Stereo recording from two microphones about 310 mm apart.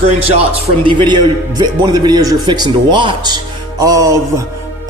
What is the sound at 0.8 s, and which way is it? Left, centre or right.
A man's voice, centre.